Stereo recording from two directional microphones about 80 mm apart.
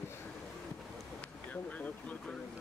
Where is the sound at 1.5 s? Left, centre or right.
Centre.